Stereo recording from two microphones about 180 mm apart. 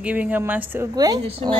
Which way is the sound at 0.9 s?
20° right (ahead or behind).